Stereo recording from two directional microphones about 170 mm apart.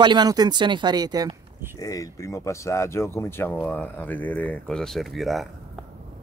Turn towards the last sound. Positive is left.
turn(degrees=0)  # may be behind; listen again after turning